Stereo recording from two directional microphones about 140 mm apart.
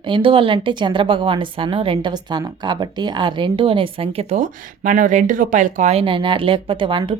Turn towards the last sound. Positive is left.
turn(degrees=-35)  # may be behind; listen again after turning